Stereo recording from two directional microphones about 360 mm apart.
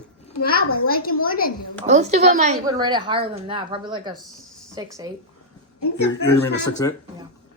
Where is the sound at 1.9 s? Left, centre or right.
Centre.